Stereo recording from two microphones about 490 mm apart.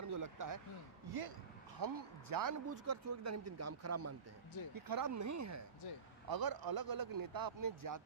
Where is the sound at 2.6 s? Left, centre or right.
Right.